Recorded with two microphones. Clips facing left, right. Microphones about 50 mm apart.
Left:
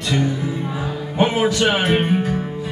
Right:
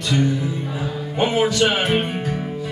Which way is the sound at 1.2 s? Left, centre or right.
Centre.